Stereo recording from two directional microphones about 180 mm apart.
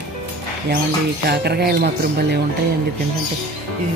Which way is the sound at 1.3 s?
65° right (ahead or behind).